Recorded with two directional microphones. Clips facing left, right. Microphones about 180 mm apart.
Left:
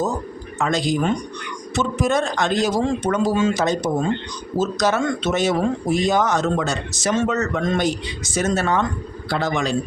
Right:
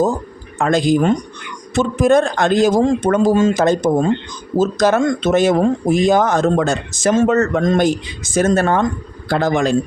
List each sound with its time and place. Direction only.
0.6 s speech: 55° right (ahead or behind)